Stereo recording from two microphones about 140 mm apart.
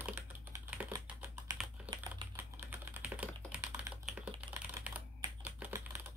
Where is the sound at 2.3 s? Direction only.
15° right (ahead or behind).